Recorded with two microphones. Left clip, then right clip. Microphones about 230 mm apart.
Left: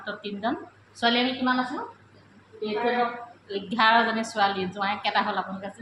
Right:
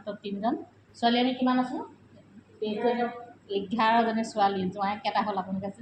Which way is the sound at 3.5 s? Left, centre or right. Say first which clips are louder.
Left 3 dB; centre.